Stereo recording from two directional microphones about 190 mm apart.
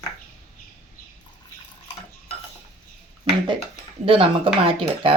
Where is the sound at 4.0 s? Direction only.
30° right (ahead or behind).